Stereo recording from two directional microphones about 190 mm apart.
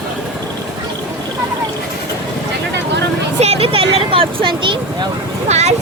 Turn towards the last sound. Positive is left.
turn(degrees=-35)  # may be behind; listen again after turning